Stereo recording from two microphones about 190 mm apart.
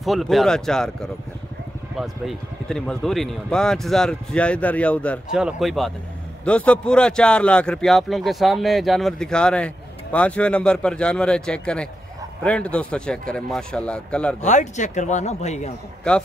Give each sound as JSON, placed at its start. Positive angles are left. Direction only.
{"t": 0.0, "sound": "speech", "side_deg": 0}
{"t": 2.0, "sound": "speech", "side_deg": 0}
{"t": 14.4, "sound": "speech", "side_deg": 40}